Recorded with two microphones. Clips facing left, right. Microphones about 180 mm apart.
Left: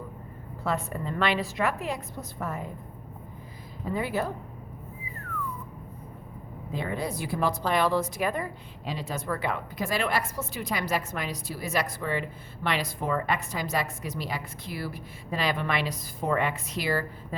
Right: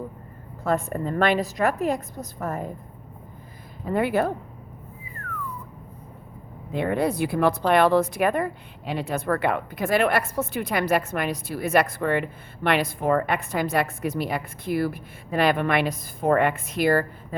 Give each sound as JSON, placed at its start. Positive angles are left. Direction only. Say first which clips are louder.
{"t": 0.6, "sound": "a woman's voice", "louder": "right 6 dB", "side_deg": -45}
{"t": 3.9, "sound": "speech", "louder": "right 7 dB", "side_deg": -65}
{"t": 6.7, "sound": "speech", "louder": "right 8 dB", "side_deg": -60}